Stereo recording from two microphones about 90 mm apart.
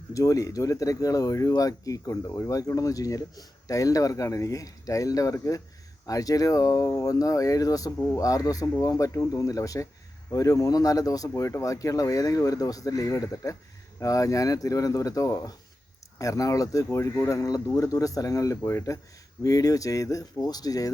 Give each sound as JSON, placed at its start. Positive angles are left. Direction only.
{"t": 0.1, "sound": "speech", "side_deg": 40}